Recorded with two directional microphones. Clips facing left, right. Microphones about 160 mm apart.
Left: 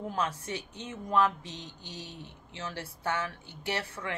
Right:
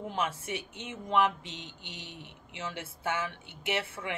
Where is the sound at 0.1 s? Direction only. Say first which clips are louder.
Right 1 dB; 20° right (ahead or behind).